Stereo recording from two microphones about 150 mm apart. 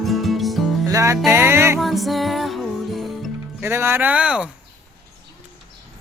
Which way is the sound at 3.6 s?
15° right (ahead or behind).